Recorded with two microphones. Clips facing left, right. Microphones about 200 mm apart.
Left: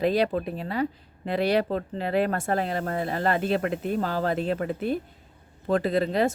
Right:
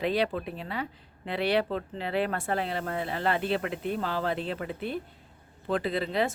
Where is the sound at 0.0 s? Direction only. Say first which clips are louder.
Left 4 dB; 40° left (ahead or behind).